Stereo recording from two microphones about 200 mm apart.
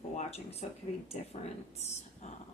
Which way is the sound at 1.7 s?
35° left (ahead or behind).